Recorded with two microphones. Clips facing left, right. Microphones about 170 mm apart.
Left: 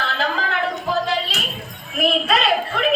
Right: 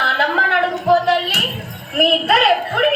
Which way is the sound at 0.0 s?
60° right (ahead or behind).